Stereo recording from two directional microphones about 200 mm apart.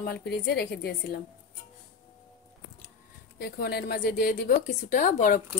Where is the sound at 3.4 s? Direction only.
50° left (ahead or behind).